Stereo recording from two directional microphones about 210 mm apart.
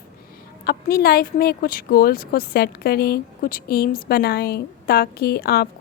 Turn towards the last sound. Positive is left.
turn(degrees=50)  # may be behind; listen again after turning